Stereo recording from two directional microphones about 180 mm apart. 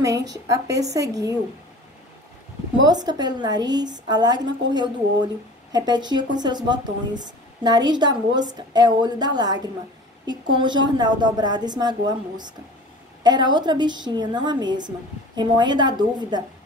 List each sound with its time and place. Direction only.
0.0 s a woman's voice: 20° right (ahead or behind)
2.9 s a woman's voice: 20° right (ahead or behind)